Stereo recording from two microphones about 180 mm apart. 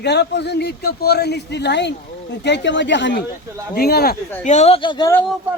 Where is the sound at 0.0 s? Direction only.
70° left (ahead or behind).